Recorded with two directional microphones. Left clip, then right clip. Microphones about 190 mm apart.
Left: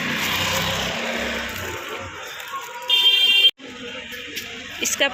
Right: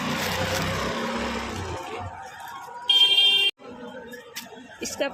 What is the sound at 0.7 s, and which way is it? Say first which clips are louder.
Vehicle: left 4 dB; 70° right (ahead or behind).